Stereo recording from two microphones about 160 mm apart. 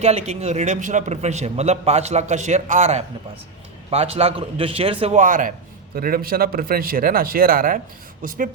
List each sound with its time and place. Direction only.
0.0 s a man's voice: 45° right (ahead or behind)
5.2 s a man's voice: 55° right (ahead or behind)